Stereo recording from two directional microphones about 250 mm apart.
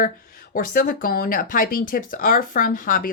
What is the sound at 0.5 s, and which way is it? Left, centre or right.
Speech, left.